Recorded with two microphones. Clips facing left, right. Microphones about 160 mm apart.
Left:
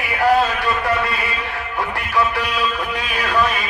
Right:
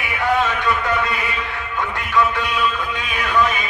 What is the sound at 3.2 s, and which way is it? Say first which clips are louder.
Music: right 1 dB; 35° left (ahead or behind).